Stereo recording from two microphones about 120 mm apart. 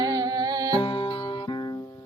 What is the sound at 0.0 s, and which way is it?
Music, 35° right (ahead or behind).